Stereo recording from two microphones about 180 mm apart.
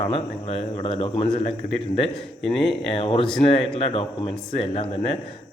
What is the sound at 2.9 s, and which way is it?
Speech, 30° left (ahead or behind).